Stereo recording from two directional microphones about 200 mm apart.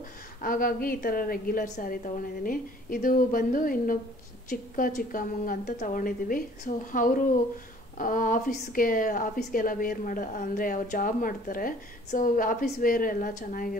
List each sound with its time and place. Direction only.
0.4 s a woman's voice: 45° left (ahead or behind)